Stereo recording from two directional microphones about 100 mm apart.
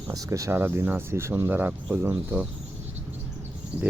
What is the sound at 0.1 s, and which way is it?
Speech, 35° right (ahead or behind).